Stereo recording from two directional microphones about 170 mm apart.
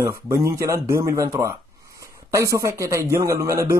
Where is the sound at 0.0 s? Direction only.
20° right (ahead or behind).